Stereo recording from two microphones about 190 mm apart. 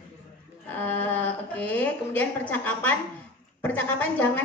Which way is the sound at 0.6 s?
10° left (ahead or behind).